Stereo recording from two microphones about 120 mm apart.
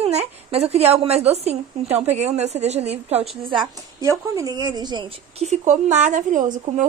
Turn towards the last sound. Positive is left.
turn(degrees=-90)